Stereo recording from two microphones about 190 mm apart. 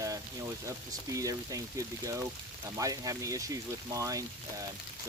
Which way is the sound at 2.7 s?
15° right (ahead or behind).